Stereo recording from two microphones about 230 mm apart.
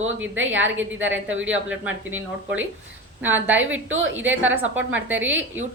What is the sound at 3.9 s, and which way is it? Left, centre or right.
Speech, right.